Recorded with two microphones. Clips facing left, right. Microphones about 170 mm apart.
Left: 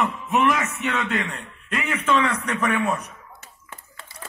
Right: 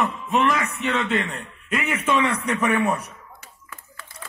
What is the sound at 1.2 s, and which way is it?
A man's voice, 10° right (ahead or behind).